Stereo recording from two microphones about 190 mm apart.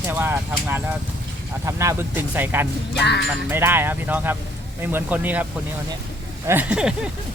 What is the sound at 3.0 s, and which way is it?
Speech, 60° left (ahead or behind).